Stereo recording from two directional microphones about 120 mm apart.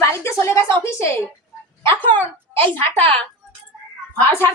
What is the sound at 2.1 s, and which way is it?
Speech, 15° left (ahead or behind).